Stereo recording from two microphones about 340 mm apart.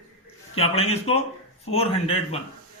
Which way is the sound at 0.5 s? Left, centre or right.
Centre.